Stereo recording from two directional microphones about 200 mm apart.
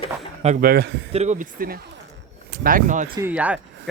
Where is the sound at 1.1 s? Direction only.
35° right (ahead or behind).